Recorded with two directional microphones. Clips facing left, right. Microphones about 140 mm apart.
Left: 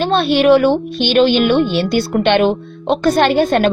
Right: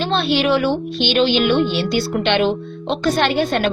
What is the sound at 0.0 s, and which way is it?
A woman's voice, 50° left (ahead or behind).